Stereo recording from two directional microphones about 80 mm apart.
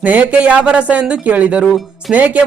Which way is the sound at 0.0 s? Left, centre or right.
Centre.